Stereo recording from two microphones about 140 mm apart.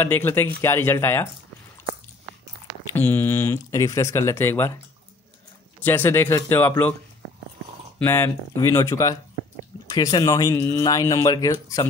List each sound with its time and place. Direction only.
0.0 s speech: 15° left (ahead or behind)
2.9 s speech: 15° left (ahead or behind)
5.8 s speech: 15° left (ahead or behind)
8.0 s speech: 15° left (ahead or behind)